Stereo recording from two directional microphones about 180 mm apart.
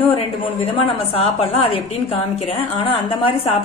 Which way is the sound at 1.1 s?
30° left (ahead or behind).